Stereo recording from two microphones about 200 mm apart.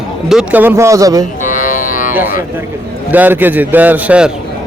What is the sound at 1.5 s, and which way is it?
Music, 40° left (ahead or behind).